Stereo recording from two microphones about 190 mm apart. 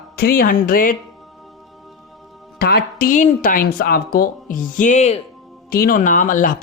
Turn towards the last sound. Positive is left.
turn(degrees=45)  # may be behind; listen again after turning